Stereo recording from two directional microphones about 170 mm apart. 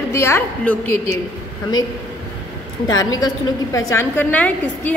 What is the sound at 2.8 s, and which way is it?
A woman's voice, 20° left (ahead or behind).